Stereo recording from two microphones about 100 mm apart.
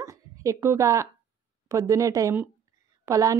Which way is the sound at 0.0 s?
30° right (ahead or behind).